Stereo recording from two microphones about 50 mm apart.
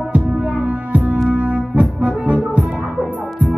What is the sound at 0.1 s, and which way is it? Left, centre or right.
Music, right.